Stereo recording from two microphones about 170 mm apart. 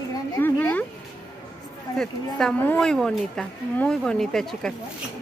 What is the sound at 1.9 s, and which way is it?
Speech, 5° left (ahead or behind).